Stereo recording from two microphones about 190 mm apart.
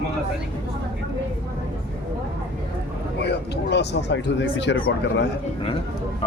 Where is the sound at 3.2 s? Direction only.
60° left (ahead or behind).